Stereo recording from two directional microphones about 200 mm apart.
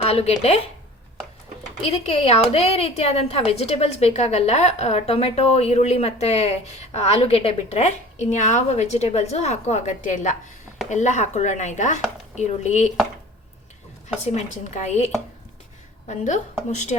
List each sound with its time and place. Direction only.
0.0 s speech: 30° left (ahead or behind)
1.9 s a woman's voice: 30° left (ahead or behind)
14.3 s a woman's voice: 35° left (ahead or behind)